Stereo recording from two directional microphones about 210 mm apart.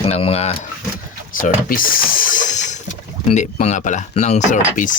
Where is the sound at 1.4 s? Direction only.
45° left (ahead or behind).